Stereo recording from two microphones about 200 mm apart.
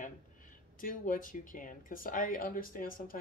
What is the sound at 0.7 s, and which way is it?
Speech, 45° left (ahead or behind).